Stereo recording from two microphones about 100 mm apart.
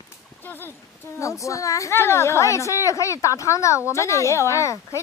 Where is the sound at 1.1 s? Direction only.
30° left (ahead or behind).